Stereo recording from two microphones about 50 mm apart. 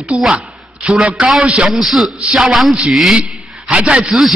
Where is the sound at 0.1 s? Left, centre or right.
Right.